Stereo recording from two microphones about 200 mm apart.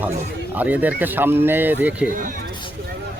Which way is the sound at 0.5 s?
10° right (ahead or behind).